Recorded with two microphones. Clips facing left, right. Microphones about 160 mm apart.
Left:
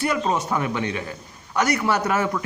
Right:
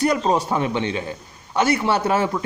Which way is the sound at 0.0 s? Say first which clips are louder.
Right 4 dB; 35° right (ahead or behind).